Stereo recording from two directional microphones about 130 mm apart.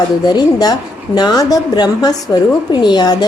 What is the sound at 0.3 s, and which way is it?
A woman's voice, 30° left (ahead or behind).